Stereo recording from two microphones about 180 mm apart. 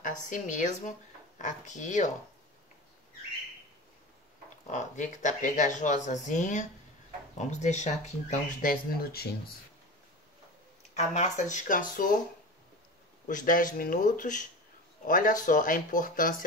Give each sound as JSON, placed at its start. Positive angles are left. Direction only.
{"t": 0.0, "sound": "speech", "side_deg": 45}
{"t": 4.6, "sound": "speech", "side_deg": 40}
{"t": 9.0, "sound": "speech", "side_deg": 60}
{"t": 11.0, "sound": "speech", "side_deg": 40}
{"t": 13.3, "sound": "speech", "side_deg": 50}